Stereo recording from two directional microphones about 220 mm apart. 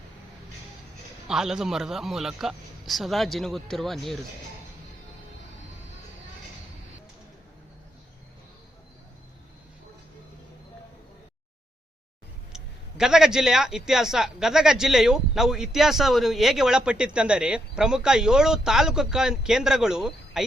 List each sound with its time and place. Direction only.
1.3 s a man's voice: centre (ahead or behind)
12.5 s a man's voice: 5° right (ahead or behind)